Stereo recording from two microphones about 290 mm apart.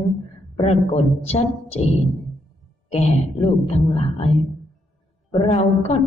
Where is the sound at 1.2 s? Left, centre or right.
Left.